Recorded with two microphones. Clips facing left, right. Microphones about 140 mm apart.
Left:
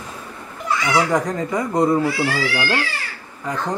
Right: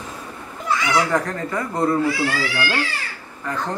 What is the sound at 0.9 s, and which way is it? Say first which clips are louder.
Speech: left 3 dB; 15° left (ahead or behind).